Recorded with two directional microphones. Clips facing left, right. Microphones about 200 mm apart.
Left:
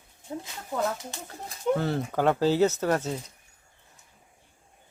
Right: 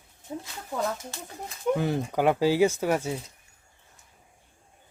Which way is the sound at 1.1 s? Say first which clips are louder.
Even; 20° left (ahead or behind).